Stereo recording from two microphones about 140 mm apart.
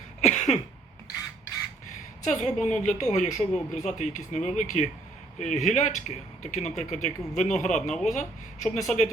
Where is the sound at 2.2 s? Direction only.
55° left (ahead or behind).